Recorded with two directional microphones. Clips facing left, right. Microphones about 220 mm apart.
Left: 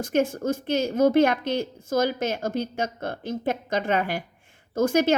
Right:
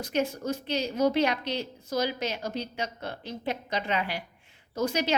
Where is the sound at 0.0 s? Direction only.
50° left (ahead or behind).